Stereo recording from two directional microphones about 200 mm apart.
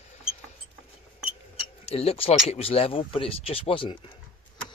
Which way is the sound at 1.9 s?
30° left (ahead or behind).